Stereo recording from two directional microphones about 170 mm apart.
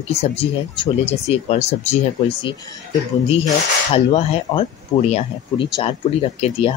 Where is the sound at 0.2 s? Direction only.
35° left (ahead or behind).